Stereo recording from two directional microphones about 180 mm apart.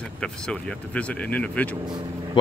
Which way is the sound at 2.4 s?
25° left (ahead or behind).